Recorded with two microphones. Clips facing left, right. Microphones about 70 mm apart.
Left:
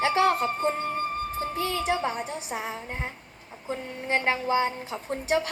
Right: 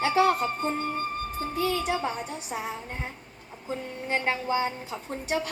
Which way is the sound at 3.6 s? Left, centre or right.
Left.